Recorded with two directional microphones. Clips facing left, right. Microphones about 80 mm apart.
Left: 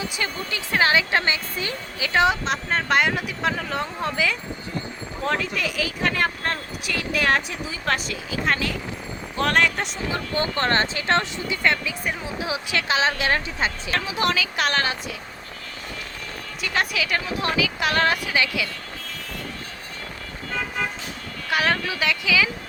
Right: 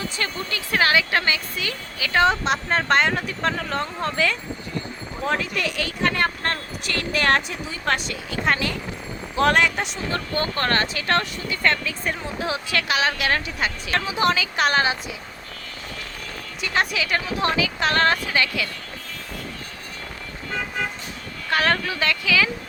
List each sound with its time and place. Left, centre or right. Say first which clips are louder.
0.0 s speech: even; centre
2.0 s speech: right 1 dB; centre
2.4 s speech: right 2 dB; centre
5.2 s speech: right 1 dB; centre
10.6 s speech: left 1 dB; left
12.9 s speech: left 1 dB; left
13.9 s speech: right 4 dB; centre
16.6 s speech: right 1 dB; centre
21.5 s speech: right 1 dB; centre